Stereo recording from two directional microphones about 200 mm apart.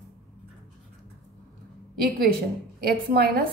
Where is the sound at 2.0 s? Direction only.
50° right (ahead or behind).